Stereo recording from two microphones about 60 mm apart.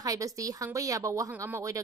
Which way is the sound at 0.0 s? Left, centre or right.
Right.